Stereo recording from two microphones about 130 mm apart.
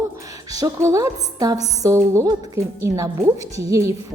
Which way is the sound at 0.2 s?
25° right (ahead or behind).